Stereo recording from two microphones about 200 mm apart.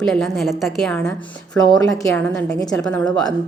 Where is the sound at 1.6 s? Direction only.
15° left (ahead or behind).